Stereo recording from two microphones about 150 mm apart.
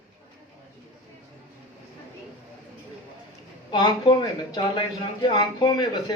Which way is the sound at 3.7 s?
30° left (ahead or behind).